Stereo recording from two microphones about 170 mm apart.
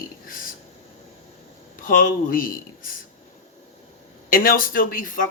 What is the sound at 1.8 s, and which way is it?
Speech, 55° left (ahead or behind).